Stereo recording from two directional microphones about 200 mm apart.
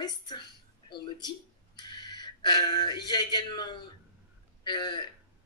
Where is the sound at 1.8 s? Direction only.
20° left (ahead or behind).